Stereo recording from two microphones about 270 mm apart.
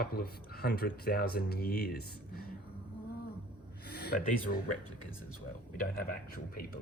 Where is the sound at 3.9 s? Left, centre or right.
Left.